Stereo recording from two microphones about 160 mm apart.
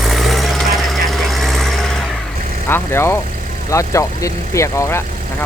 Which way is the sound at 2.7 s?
15° left (ahead or behind).